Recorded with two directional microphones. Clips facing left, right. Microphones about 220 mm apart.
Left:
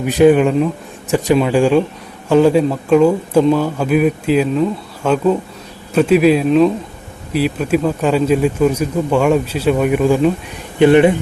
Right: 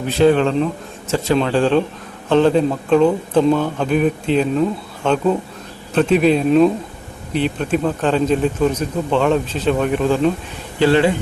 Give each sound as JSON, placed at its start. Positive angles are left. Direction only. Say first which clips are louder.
{"t": 0.0, "sound": "speech", "louder": "left 4 dB", "side_deg": 15}